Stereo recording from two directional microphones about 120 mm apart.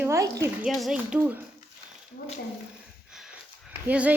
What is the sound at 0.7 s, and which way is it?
Speech, centre (ahead or behind).